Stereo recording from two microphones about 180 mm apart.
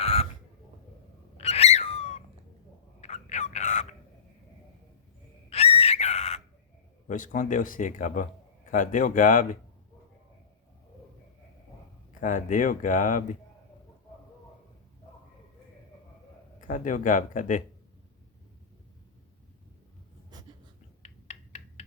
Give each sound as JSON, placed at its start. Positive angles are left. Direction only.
{"t": 0.0, "sound": "a sound", "side_deg": 35}
{"t": 1.4, "sound": "owl", "side_deg": 35}
{"t": 3.0, "sound": "a sound", "side_deg": 40}
{"t": 5.5, "sound": "whistle", "side_deg": 35}
{"t": 7.1, "sound": "speech", "side_deg": 45}
{"t": 12.2, "sound": "speech", "side_deg": 45}
{"t": 16.6, "sound": "speech", "side_deg": 45}
{"t": 20.3, "sound": "writing", "side_deg": -20}
{"t": 21.0, "sound": "a sound", "side_deg": 35}